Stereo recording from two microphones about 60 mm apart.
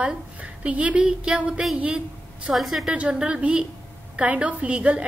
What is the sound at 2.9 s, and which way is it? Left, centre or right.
A woman's voice, centre.